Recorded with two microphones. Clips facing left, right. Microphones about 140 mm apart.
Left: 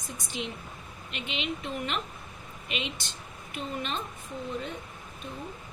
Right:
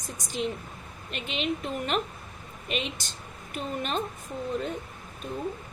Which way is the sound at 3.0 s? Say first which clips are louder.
Right 1 dB; 45° right (ahead or behind).